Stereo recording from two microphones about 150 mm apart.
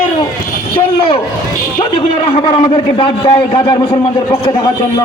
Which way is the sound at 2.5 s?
35° left (ahead or behind).